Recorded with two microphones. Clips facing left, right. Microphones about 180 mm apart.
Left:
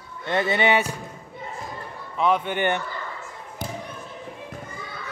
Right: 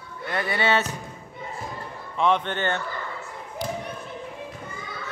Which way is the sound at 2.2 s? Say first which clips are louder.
Left 1 dB; 5° left (ahead or behind).